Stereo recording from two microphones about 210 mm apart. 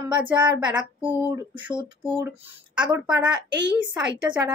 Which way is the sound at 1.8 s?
5° right (ahead or behind).